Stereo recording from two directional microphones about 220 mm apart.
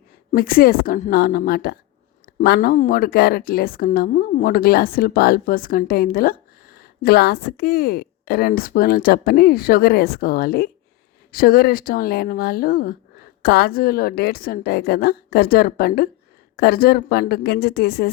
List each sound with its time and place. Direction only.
0.3 s a woman's voice: 40° left (ahead or behind)